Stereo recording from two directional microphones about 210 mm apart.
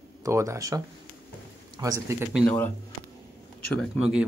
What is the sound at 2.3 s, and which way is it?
Speech, centre (ahead or behind).